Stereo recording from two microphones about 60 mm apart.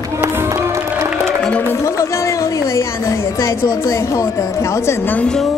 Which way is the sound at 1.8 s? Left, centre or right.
Left.